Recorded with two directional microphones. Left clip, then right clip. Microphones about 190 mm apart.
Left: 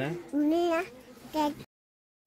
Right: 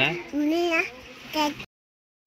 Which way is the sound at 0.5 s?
50° left (ahead or behind).